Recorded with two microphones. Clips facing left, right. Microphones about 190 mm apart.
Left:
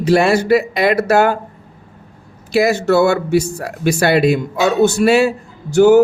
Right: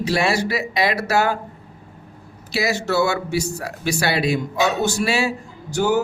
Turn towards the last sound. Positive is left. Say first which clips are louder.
# left 11 dB
turn(degrees=60)  # may be behind; listen again after turning